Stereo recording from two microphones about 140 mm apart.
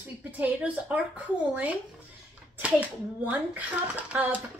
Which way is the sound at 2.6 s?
10° right (ahead or behind).